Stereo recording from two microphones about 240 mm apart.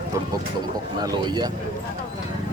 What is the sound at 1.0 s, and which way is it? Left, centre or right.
Speech, centre.